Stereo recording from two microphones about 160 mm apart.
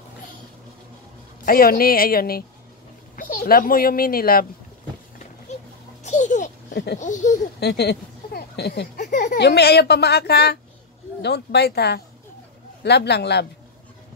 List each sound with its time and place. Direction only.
1.4 s a child's voice: 65° left (ahead or behind)
6.0 s babbling: 50° left (ahead or behind)
6.7 s speech: 90° left
7.0 s speech: 50° left (ahead or behind)
7.6 s speech: 90° left